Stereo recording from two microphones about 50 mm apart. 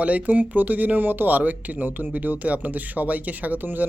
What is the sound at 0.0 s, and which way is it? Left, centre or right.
Speech, right.